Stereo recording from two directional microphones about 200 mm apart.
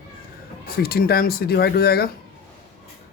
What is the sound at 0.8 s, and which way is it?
Speech, 50° left (ahead or behind).